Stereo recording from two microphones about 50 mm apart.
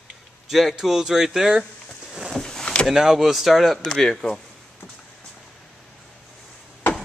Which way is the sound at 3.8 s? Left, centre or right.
Centre.